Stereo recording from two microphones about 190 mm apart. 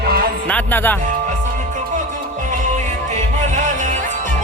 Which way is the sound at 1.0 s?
40° right (ahead or behind).